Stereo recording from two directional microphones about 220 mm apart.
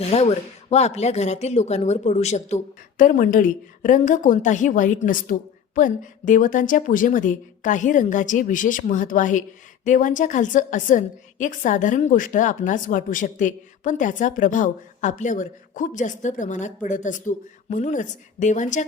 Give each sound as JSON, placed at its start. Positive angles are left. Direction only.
{"t": 0.0, "sound": "a woman's voice", "side_deg": 30}